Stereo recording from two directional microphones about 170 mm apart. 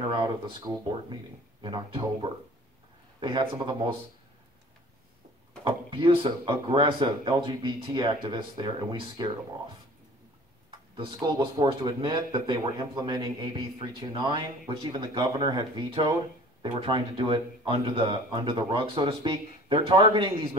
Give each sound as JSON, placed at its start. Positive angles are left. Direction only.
{"t": 0.1, "sound": "a man's voice", "side_deg": -25}
{"t": 3.2, "sound": "a man's voice", "side_deg": -30}
{"t": 5.6, "sound": "a man's voice", "side_deg": -30}
{"t": 11.0, "sound": "a man's voice", "side_deg": -25}